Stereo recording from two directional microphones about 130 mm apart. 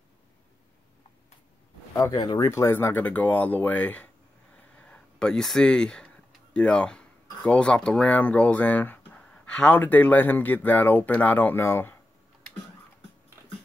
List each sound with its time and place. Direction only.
2.0 s speech: 30° left (ahead or behind)
2.5 s speech: 20° left (ahead or behind)